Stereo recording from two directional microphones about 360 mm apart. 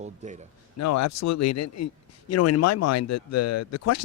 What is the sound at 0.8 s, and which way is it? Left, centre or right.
Speech, left.